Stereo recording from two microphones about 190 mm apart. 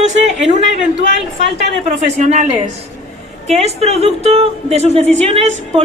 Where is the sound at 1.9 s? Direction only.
40° right (ahead or behind).